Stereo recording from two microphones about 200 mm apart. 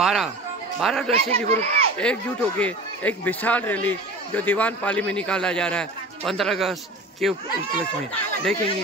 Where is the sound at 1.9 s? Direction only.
5° left (ahead or behind).